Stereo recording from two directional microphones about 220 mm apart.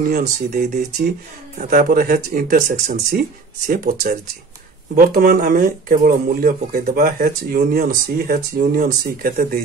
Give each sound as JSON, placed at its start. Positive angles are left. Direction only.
{"t": 0.1, "sound": "speech", "side_deg": -45}